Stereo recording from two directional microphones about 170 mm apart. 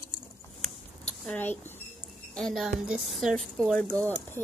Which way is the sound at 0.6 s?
5° left (ahead or behind).